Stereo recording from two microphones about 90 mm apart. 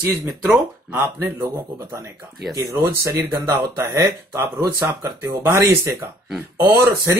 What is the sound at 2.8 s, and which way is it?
Speech, 30° right (ahead or behind).